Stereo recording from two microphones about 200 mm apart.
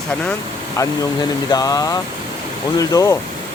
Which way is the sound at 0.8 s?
15° left (ahead or behind).